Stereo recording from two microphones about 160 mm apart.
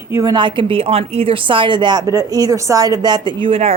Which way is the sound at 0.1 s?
20° right (ahead or behind).